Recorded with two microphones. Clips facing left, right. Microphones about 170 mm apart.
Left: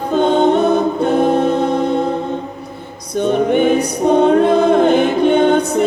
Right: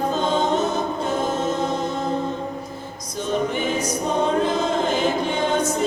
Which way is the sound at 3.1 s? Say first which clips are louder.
Left 10 dB; 60° left (ahead or behind).